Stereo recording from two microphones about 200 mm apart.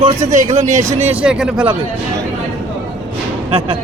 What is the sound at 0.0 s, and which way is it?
Speech, 40° right (ahead or behind).